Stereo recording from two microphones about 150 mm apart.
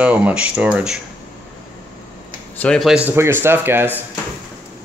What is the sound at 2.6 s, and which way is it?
Speech, 5° left (ahead or behind).